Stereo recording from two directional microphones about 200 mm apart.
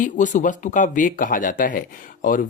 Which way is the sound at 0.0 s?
40° left (ahead or behind).